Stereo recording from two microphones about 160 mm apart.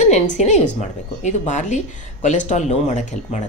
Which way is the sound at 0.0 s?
45° left (ahead or behind).